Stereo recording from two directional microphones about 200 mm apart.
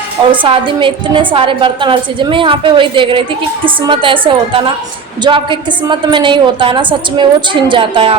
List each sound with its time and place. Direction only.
0.3 s a woman's voice: 25° right (ahead or behind)